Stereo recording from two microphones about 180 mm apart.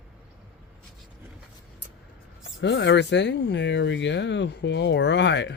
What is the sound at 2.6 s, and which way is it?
Speech, 80° left.